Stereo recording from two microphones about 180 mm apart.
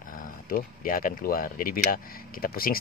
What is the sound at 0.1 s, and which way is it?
Speech, 50° left (ahead or behind).